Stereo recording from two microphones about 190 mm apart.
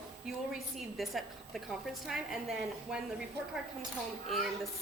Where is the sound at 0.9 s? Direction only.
Centre (ahead or behind).